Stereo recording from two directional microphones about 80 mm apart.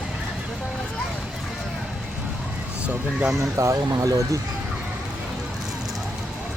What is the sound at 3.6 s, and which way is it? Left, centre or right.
Speech, right.